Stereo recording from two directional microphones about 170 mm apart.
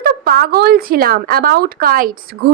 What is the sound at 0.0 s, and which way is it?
A woman's voice, 65° right (ahead or behind).